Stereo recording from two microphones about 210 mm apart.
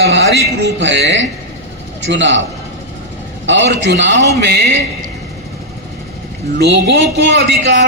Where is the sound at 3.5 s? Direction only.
55° right (ahead or behind).